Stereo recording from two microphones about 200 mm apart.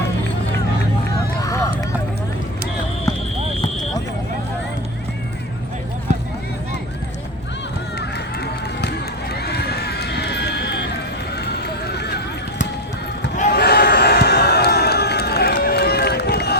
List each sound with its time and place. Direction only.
1.4 s run: 15° left (ahead or behind)
3.1 s basketball bounce: 15° left (ahead or behind)
7.9 s run: 55° left (ahead or behind)
13.5 s a sound: 55° left (ahead or behind)